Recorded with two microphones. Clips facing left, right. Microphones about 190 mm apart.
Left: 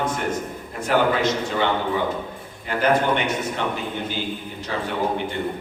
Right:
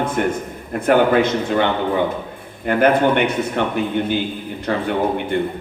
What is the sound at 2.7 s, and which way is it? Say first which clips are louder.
Speech: right 5 dB; 55° right (ahead or behind).